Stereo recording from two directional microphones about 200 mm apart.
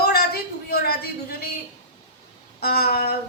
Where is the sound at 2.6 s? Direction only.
50° left (ahead or behind).